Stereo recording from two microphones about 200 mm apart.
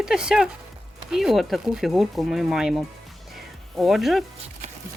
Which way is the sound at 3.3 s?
Centre (ahead or behind).